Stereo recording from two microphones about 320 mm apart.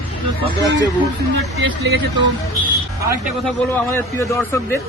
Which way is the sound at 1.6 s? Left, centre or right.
Right.